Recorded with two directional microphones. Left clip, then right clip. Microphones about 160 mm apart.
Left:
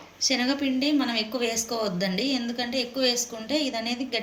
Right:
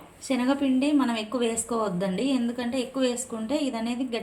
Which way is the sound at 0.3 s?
50° right (ahead or behind).